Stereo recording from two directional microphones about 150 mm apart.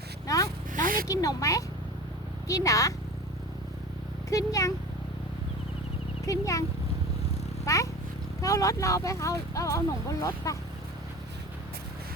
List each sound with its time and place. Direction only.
0.3 s zipper: 25° left (ahead or behind)
0.8 s a sound: 65° right (ahead or behind)
1.0 s speech: 25° left (ahead or behind)
4.3 s speech: 20° left (ahead or behind)
6.2 s speech: 20° left (ahead or behind)
7.6 s cat: 20° left (ahead or behind)
8.4 s speech: 20° left (ahead or behind)